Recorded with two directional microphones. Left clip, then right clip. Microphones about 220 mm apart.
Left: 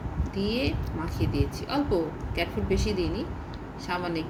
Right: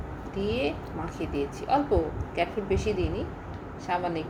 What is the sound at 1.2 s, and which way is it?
Speech, 5° right (ahead or behind).